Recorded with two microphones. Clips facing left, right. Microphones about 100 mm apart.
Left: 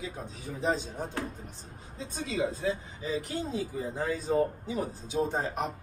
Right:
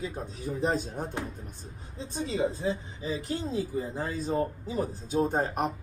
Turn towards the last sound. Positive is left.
turn(degrees=-50)  # may be behind; listen again after turning